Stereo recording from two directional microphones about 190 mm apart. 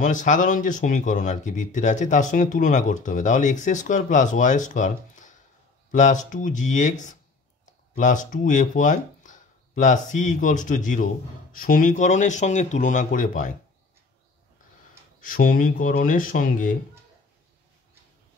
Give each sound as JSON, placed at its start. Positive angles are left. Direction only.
{"t": 0.0, "sound": "speech", "side_deg": 40}
{"t": 15.1, "sound": "speech", "side_deg": 50}